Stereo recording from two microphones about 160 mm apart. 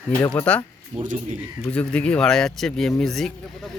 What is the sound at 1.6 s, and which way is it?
Speech, 5° left (ahead or behind).